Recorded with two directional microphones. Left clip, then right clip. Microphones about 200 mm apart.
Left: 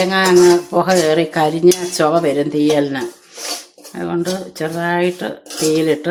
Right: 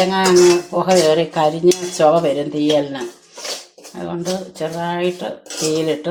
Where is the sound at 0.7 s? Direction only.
40° left (ahead or behind).